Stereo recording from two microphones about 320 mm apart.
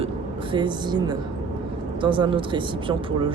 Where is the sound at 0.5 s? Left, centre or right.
Centre.